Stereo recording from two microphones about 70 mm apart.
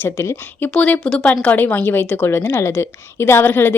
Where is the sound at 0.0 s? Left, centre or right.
Left.